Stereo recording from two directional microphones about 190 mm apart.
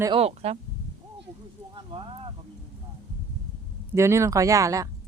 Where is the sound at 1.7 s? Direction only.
25° right (ahead or behind).